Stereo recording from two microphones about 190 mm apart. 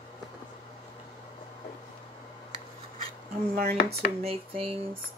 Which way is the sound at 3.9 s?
30° right (ahead or behind).